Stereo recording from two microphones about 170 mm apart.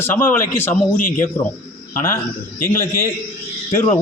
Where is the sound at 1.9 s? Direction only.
55° left (ahead or behind).